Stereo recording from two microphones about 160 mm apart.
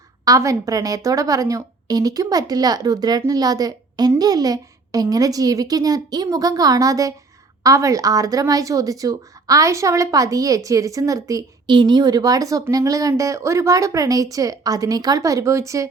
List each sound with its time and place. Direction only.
0.3 s speech: 20° right (ahead or behind)